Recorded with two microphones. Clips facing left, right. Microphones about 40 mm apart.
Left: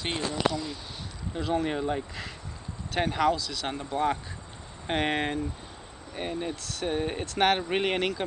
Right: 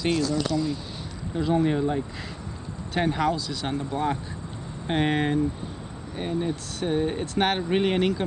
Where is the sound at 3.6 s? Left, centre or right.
Centre.